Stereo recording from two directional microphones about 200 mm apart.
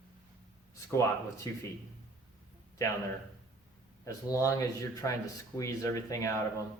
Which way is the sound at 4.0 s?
15° left (ahead or behind).